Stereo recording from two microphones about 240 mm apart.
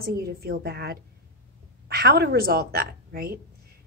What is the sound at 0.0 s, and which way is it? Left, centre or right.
A woman's voice, right.